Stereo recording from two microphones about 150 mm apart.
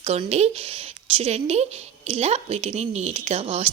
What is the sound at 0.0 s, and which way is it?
Speech, 45° right (ahead or behind).